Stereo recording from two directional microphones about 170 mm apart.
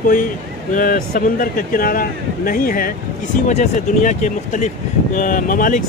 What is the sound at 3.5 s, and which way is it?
Speech, 45° left (ahead or behind).